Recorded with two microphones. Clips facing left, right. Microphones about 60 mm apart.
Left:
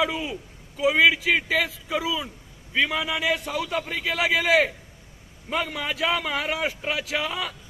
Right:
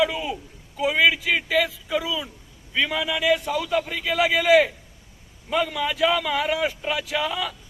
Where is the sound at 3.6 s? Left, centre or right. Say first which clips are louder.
Right 3 dB; left.